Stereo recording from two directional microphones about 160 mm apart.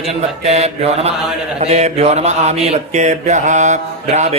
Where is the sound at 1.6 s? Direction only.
45° right (ahead or behind).